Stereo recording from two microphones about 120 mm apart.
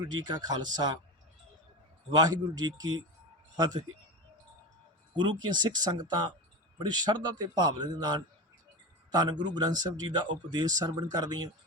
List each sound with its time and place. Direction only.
0.1 s speech: 35° right (ahead or behind)
2.1 s speech: 35° right (ahead or behind)
5.1 s speech: 40° right (ahead or behind)